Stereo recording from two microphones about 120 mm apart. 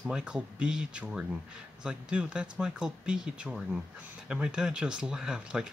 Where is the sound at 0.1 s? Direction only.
10° right (ahead or behind).